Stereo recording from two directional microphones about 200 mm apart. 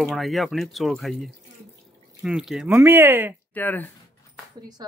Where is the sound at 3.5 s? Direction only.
10° left (ahead or behind).